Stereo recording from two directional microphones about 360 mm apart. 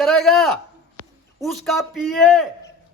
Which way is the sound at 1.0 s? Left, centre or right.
Right.